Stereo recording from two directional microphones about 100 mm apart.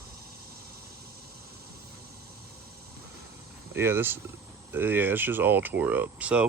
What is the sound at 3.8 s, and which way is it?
Speech, 25° right (ahead or behind).